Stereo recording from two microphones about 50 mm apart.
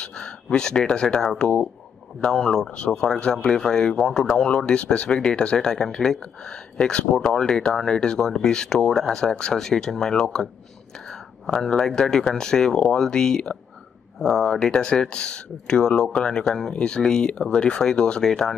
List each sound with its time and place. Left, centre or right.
0.0 s speech: centre
2.3 s speech: centre